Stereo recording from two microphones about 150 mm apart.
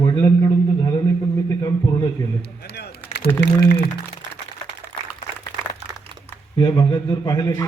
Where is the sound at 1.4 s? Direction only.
20° left (ahead or behind).